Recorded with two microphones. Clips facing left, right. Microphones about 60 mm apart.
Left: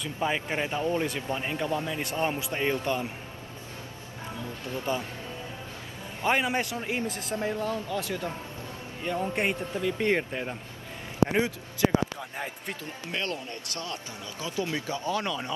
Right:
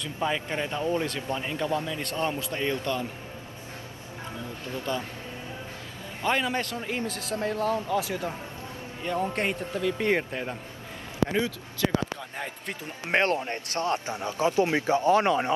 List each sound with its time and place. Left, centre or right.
0.0 s a man's voice: centre
4.9 s a man's voice: centre
6.2 s a man's voice: centre
7.9 s a man's voice: centre
11.2 s a man's voice: left
12.2 s a man's voice: centre
13.0 s speech: right